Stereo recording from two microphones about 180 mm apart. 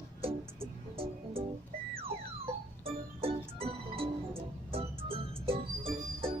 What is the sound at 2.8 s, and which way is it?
Music, 30° right (ahead or behind).